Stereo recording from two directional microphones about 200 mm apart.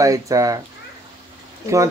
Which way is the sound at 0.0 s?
15° right (ahead or behind).